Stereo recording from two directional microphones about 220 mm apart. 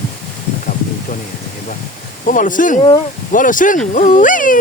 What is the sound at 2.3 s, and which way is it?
Speech, 35° left (ahead or behind).